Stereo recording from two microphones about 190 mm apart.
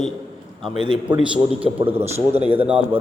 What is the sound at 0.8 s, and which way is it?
Speech, 25° right (ahead or behind).